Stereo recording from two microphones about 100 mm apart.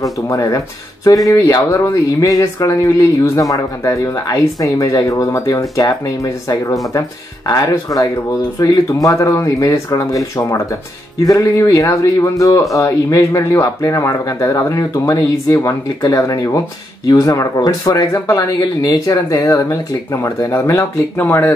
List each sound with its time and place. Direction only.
0.0 s speech: 35° left (ahead or behind)